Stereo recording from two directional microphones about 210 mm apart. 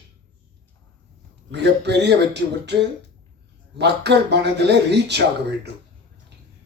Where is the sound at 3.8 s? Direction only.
55° right (ahead or behind).